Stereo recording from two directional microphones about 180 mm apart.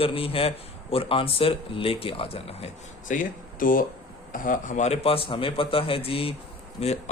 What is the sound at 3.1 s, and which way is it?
A man's voice, 50° left (ahead or behind).